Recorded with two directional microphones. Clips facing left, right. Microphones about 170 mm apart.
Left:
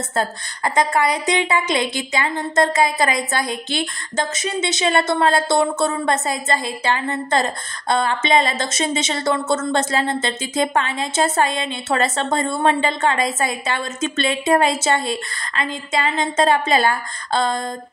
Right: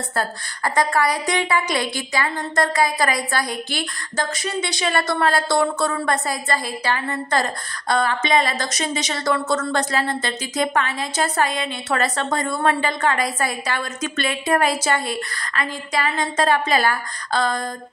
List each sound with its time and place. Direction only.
0.1 s a woman's voice: 20° left (ahead or behind)